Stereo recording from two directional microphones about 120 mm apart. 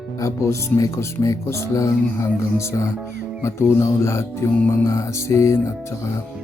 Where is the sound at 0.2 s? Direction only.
25° left (ahead or behind).